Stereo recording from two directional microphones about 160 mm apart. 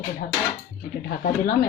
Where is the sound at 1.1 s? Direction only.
65° left (ahead or behind).